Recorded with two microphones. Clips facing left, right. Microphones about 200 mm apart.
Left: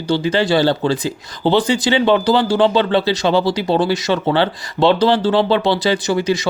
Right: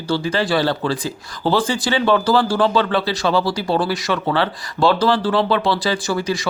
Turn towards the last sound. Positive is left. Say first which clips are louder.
# left 4 dB
turn(degrees=20)  # may be behind; listen again after turning